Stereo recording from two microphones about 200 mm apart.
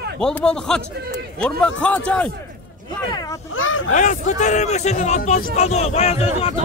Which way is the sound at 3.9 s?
40° left (ahead or behind).